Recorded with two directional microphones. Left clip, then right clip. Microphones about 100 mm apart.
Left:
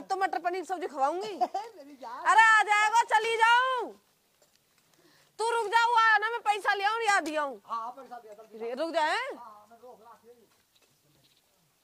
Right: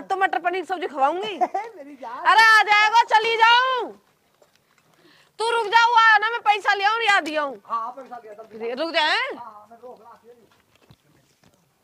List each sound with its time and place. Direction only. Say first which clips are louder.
0.0 s speech: right 8 dB; 30° left (ahead or behind)
1.4 s speech: right 6 dB; 10° left (ahead or behind)
2.2 s a woman's voice: right 6 dB; 35° left (ahead or behind)
5.4 s a woman's voice: right 8 dB; 30° left (ahead or behind)
7.6 s speech: right 8 dB; 10° left (ahead or behind)
8.5 s speech: right 7 dB; 25° left (ahead or behind)
9.4 s speech: right 9 dB; 5° left (ahead or behind)